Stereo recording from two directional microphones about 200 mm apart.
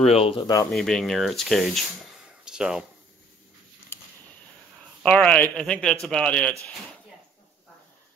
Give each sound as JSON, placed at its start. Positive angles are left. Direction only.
{"t": 0.0, "sound": "speech", "side_deg": 30}
{"t": 0.7, "sound": "speech", "side_deg": 0}
{"t": 2.4, "sound": "a sound", "side_deg": -5}
{"t": 5.0, "sound": "speech", "side_deg": 5}